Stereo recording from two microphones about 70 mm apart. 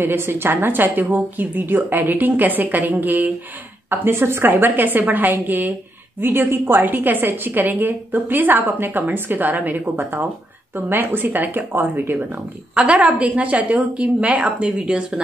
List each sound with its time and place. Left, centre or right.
0.0 s a woman's voice: right; by 15.2 s centre